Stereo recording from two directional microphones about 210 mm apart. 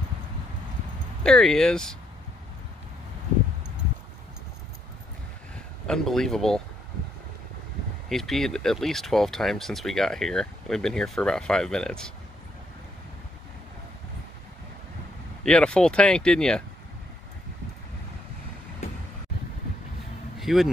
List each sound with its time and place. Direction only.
1.2 s speech: centre (ahead or behind)
5.9 s speech: centre (ahead or behind)
8.1 s speech: centre (ahead or behind)
15.4 s speech: 5° left (ahead or behind)
20.3 s speech: centre (ahead or behind)